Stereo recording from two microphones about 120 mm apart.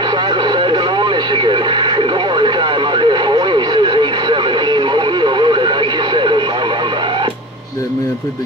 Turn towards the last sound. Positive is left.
turn(degrees=-40)  # may be behind; listen again after turning